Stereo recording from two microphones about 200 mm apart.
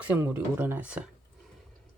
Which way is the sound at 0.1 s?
10° right (ahead or behind).